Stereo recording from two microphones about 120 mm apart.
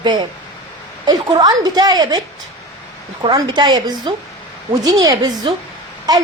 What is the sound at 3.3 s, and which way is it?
A woman's voice, 35° right (ahead or behind).